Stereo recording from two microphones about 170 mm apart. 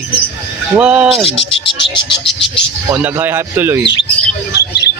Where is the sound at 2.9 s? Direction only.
10° right (ahead or behind).